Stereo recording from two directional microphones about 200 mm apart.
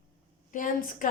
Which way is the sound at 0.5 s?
40° left (ahead or behind).